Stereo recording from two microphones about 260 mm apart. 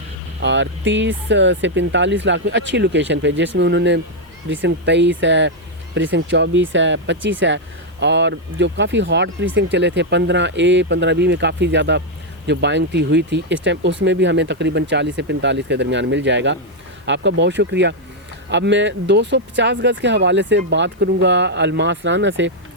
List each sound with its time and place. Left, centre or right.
0.4 s speech: right